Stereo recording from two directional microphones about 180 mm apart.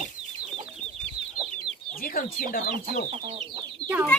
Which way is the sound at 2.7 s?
30° right (ahead or behind).